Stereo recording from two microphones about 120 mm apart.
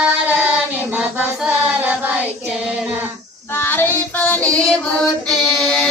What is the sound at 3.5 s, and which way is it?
Child singing, 15° left (ahead or behind).